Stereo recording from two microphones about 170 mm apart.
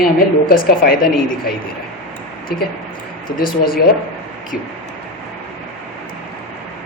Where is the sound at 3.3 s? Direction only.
55° left (ahead or behind).